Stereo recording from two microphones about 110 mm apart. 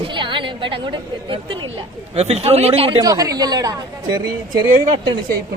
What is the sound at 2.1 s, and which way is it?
Speech, 70° right (ahead or behind).